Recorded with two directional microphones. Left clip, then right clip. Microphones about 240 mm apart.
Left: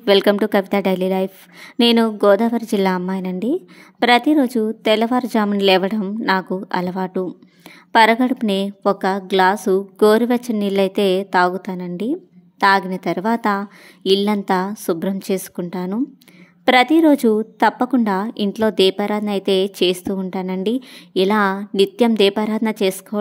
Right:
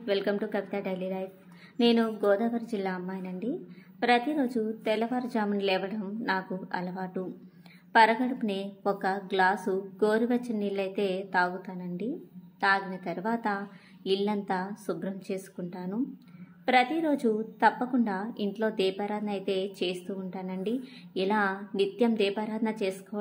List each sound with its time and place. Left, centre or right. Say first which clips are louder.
0.0 s a woman's voice: left 15 dB; left